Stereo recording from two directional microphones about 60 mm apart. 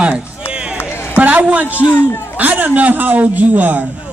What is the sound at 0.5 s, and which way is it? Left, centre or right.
Run, centre.